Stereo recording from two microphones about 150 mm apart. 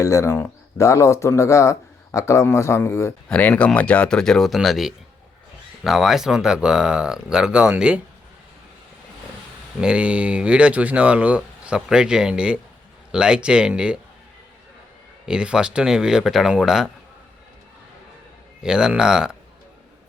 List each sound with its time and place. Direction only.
0.0 s speech: 20° left (ahead or behind); by 8.0 s 5° right (ahead or behind)
9.8 s speech: 5° right (ahead or behind)
15.3 s speech: 5° right (ahead or behind)
18.6 s speech: 5° right (ahead or behind)